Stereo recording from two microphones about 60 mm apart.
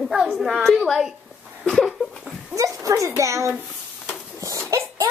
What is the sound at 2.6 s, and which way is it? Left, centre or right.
Speech, right.